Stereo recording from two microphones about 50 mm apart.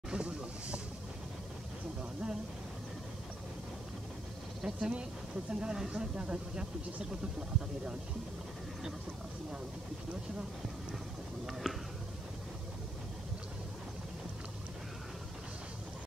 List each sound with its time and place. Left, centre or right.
0.1 s boat: right
4.6 s speech: centre
11.4 s a sound: centre